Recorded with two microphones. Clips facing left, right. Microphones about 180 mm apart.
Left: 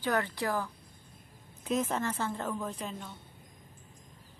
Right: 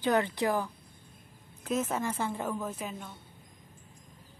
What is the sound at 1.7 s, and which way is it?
A woman's voice, 5° right (ahead or behind).